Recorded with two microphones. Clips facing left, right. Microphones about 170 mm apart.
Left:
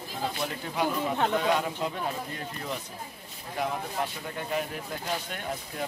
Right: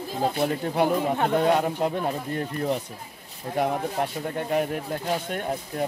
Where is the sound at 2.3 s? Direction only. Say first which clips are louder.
Right 9 dB; 60° right (ahead or behind).